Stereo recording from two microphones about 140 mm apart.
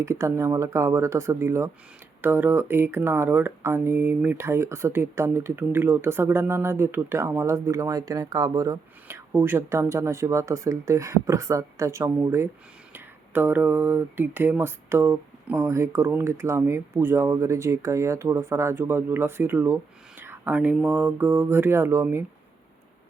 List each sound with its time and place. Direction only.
0.0 s speech: 20° right (ahead or behind)